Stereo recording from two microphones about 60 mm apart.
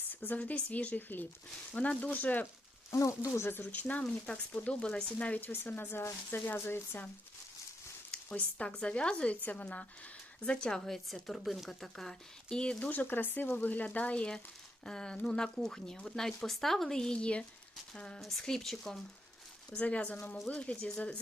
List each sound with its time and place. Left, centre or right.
0.1 s a sound: left
0.3 s speech: left
2.9 s speech: left
3.4 s speech: left
3.7 s speech: left
5.5 s speech: left
8.4 s speech: left
10.8 s a woman's voice: centre
12.9 s speech: left; by 18.2 s centre
18.2 s a woman's voice: centre
19.8 s speech: left